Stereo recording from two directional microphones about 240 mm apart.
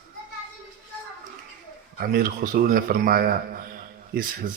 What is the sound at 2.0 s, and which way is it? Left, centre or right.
A man's voice, right.